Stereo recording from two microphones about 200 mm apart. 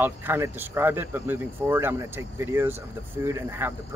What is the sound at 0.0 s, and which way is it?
Speech, 10° right (ahead or behind).